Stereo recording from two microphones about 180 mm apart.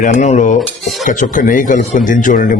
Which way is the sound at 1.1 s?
45° left (ahead or behind).